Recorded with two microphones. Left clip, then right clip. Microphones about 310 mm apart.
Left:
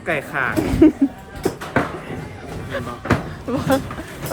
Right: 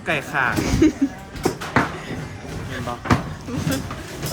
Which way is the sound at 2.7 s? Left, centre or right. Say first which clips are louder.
Even; centre.